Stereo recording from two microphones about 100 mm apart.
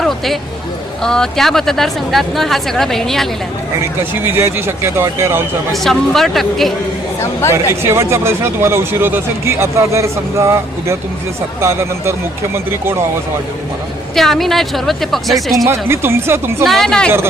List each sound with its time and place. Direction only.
1.0 s speech: 5° left (ahead or behind)
3.8 s speech: 20° right (ahead or behind)
5.7 s speech: centre (ahead or behind)
7.5 s speech: 25° right (ahead or behind)
14.2 s speech: 5° left (ahead or behind)
15.6 s speech: 25° right (ahead or behind)
16.6 s speech: 5° left (ahead or behind)